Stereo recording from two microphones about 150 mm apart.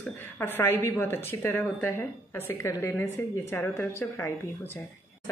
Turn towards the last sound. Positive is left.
turn(degrees=15)  # may be behind; listen again after turning